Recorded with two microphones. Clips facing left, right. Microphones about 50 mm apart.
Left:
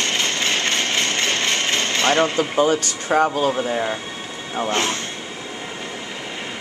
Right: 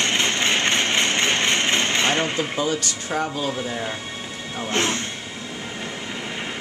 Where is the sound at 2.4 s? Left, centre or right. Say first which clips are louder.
Left 6 dB; left.